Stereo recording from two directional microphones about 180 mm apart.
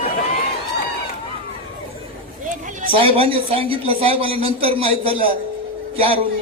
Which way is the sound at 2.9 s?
30° right (ahead or behind).